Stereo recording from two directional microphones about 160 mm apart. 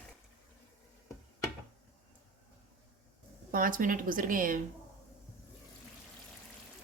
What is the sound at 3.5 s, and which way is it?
Speech, 60° right (ahead or behind).